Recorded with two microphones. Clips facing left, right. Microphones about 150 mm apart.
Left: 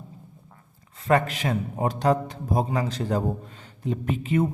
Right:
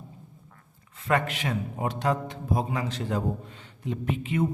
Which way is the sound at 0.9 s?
35° left (ahead or behind).